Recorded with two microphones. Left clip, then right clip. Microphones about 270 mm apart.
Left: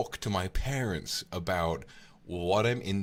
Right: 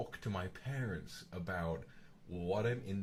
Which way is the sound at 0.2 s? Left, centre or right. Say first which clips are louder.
Left 10 dB; left.